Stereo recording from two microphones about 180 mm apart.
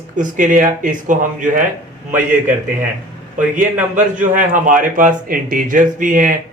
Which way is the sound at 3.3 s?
45° right (ahead or behind).